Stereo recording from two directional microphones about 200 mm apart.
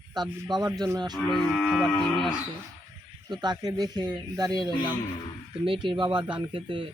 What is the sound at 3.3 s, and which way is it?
Speech, 20° right (ahead or behind).